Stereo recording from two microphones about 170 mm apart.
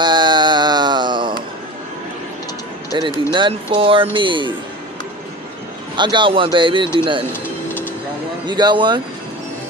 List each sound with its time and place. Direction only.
0.0 s a sound: 25° right (ahead or behind)
2.9 s speech: 25° right (ahead or behind)
5.9 s speech: 25° right (ahead or behind)
7.6 s vehicle: 10° left (ahead or behind)
8.5 s speech: 25° right (ahead or behind)